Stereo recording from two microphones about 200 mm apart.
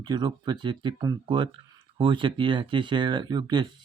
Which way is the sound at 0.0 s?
20° right (ahead or behind).